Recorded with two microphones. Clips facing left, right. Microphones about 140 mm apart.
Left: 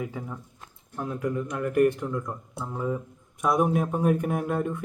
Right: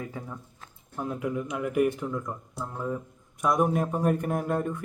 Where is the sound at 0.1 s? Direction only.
5° left (ahead or behind).